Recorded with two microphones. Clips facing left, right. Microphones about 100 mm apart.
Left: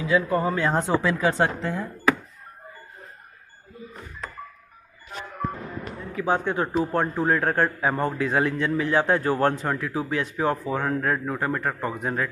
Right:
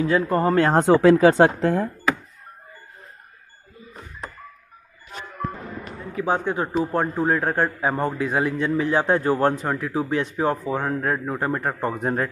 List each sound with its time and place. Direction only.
0.0 s speech: 50° right (ahead or behind)
6.1 s a man's voice: 20° right (ahead or behind)
9.9 s a man's voice: 30° right (ahead or behind)
11.8 s speech: 35° right (ahead or behind)